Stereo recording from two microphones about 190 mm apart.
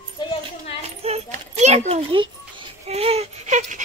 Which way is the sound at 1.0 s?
35° right (ahead or behind).